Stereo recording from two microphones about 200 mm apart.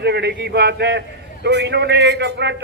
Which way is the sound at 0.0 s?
55° right (ahead or behind).